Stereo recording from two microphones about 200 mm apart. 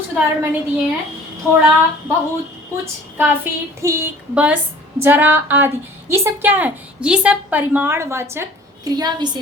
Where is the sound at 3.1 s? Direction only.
10° right (ahead or behind).